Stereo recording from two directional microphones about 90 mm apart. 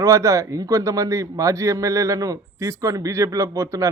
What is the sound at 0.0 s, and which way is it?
A man's voice, 35° right (ahead or behind).